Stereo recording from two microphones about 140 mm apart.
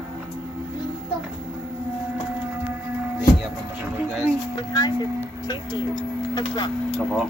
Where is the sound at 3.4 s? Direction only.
5° right (ahead or behind).